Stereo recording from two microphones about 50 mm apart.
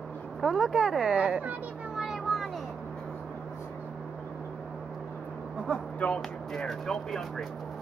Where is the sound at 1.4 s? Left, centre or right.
Right.